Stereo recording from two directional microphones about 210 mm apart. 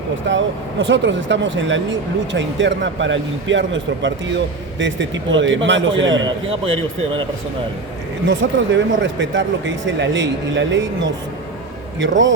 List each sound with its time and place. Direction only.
0.3 s speech: 65° right (ahead or behind)
8.3 s speech: 60° right (ahead or behind)